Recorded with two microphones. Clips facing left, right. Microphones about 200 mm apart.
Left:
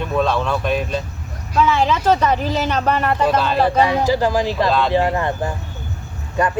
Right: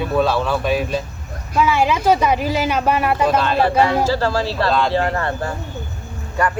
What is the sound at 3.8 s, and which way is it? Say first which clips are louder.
Speech: even; 15° left (ahead or behind).